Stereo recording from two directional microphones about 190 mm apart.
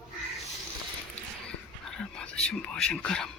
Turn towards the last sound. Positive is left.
turn(degrees=5)  # may be behind; listen again after turning